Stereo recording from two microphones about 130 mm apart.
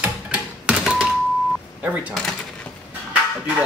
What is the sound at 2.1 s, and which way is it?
Drawer open or close, 5° left (ahead or behind).